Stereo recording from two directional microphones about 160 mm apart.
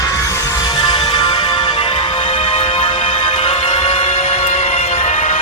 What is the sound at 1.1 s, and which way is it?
Music, 30° left (ahead or behind).